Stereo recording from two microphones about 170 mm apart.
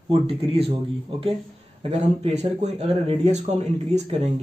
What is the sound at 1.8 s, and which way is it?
A man's voice, 40° right (ahead or behind).